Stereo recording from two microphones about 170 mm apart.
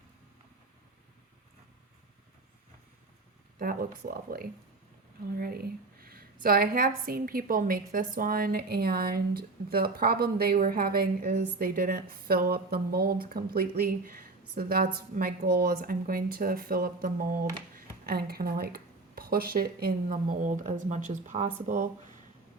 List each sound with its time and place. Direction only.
3.6 s a woman's voice: 60° right (ahead or behind)